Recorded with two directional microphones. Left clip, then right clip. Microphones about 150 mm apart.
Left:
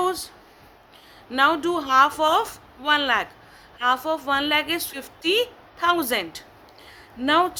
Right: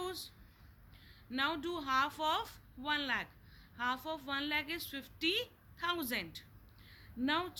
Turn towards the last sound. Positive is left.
turn(degrees=40)  # may be behind; listen again after turning